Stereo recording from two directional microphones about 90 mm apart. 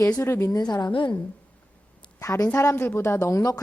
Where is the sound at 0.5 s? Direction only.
50° left (ahead or behind).